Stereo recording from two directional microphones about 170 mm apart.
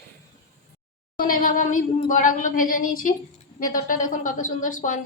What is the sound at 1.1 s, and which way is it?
A woman's voice, 55° left (ahead or behind).